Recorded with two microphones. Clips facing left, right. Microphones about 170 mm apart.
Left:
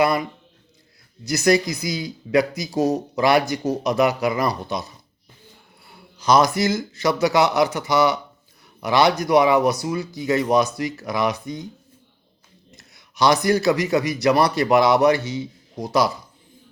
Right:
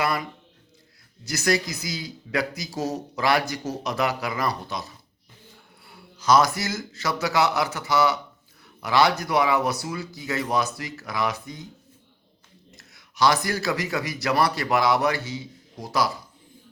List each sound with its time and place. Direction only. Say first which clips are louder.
0.0 s a man's voice: left 7 dB; 15° left (ahead or behind)
6.1 s a man's voice: left 3 dB; 20° left (ahead or behind)
12.7 s a man's voice: left 3 dB; 20° left (ahead or behind)